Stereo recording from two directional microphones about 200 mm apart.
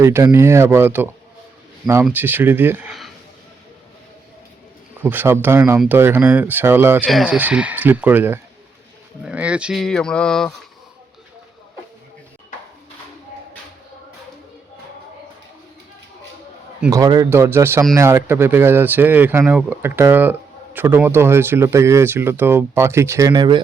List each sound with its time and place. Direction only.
0.0 s speech: 15° right (ahead or behind)
5.0 s speech: 10° right (ahead or behind)
7.0 s speech: centre (ahead or behind)
16.9 s speech: 20° right (ahead or behind)